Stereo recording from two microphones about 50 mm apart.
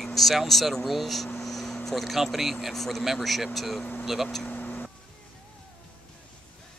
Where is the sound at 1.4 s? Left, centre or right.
Centre.